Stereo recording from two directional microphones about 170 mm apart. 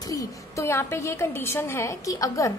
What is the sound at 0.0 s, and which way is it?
A woman's voice, 20° left (ahead or behind).